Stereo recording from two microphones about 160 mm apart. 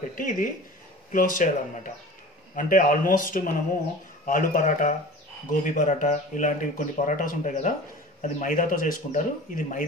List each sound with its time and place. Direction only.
0.2 s speech: 55° left (ahead or behind)